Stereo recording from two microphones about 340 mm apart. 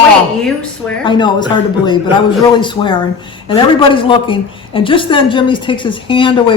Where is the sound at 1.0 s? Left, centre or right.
Centre.